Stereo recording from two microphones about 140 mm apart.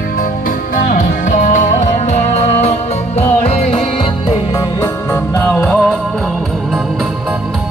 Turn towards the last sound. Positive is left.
turn(degrees=5)  # may be behind; listen again after turning